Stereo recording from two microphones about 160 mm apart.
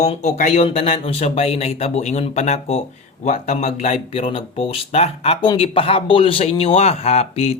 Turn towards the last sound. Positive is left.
turn(degrees=40)  # may be behind; listen again after turning